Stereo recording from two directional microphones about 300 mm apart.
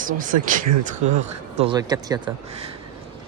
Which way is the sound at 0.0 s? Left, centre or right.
Right.